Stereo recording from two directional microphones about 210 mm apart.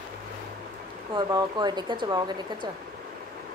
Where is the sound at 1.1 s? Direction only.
20° right (ahead or behind).